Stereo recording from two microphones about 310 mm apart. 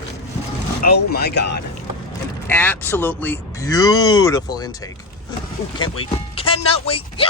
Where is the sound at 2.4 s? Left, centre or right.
Centre.